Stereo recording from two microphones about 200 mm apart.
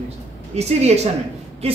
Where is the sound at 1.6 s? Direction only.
30° right (ahead or behind).